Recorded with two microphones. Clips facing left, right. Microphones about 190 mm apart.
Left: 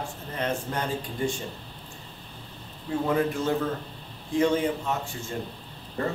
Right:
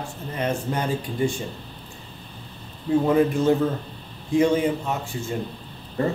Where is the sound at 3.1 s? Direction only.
20° right (ahead or behind).